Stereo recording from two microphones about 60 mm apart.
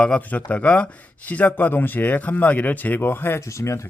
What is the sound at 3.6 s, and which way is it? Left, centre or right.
Speech, left.